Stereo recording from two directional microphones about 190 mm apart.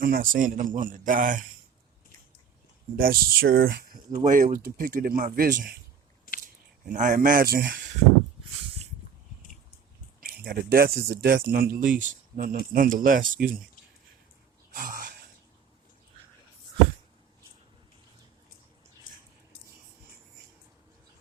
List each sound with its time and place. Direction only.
0.0 s speech: 45° right (ahead or behind)
3.0 s speech: 50° right (ahead or behind)
6.3 s a sound: 50° left (ahead or behind)
6.8 s speech: 45° right (ahead or behind)
10.2 s speech: 55° right (ahead or behind)
14.7 s a sound: 45° right (ahead or behind)